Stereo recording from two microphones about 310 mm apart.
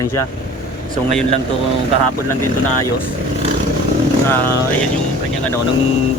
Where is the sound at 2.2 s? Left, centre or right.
Left.